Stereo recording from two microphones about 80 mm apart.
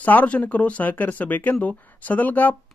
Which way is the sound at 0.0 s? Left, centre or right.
Left.